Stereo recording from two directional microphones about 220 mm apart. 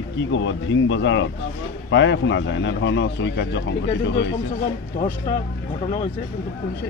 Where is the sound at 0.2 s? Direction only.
60° left (ahead or behind).